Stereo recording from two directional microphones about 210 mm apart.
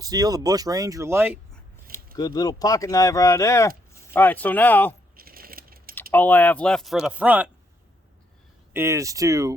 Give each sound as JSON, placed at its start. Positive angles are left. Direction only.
{"t": 0.0, "sound": "speech", "side_deg": -15}
{"t": 2.1, "sound": "speech", "side_deg": 20}
{"t": 5.1, "sound": "keys jangling", "side_deg": -45}
{"t": 5.9, "sound": "speech", "side_deg": 10}
{"t": 8.7, "sound": "speech", "side_deg": -15}